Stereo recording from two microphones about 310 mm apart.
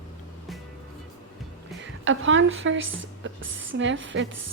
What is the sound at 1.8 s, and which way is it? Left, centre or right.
A woman's voice, right.